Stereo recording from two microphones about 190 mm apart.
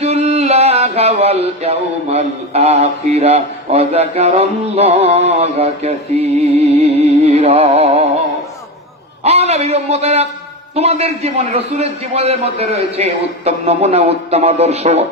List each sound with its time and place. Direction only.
0.0 s music: 35° right (ahead or behind)
9.2 s a man's voice: 35° right (ahead or behind)